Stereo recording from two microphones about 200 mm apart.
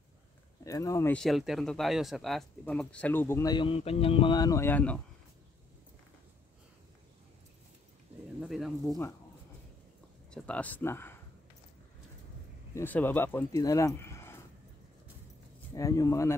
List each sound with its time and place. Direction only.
0.7 s speech: 15° left (ahead or behind)
1.1 s speech: centre (ahead or behind)
8.4 s bird: centre (ahead or behind)
8.8 s speech: 15° left (ahead or behind)
10.3 s speech: 5° left (ahead or behind)
12.7 s speech: 10° left (ahead or behind)
15.7 s speech: 15° left (ahead or behind)